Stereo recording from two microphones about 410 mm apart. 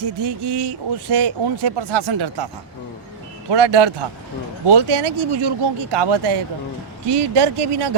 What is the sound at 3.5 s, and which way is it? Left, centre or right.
A man's voice, right.